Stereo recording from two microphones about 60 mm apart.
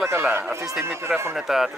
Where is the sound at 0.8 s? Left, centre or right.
Right.